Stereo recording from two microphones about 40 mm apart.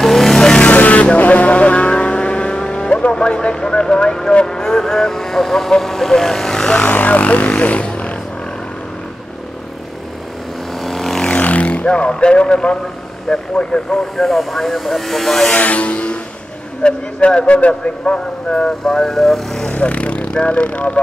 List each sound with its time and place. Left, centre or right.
0.0 s vehicle: centre
0.5 s vehicle: left; by 6.7 s centre
6.9 s music: left
10.8 s vehicle: centre
11.4 s vehicle: left
13.3 s a man's voice: left
14.1 s speech: centre
15.5 s a sound: left
16.8 s a man's voice: left
18.9 s speech: centre
19.7 s speech: left